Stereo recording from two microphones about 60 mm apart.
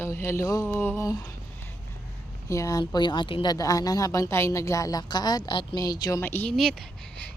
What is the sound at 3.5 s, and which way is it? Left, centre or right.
Speech, left.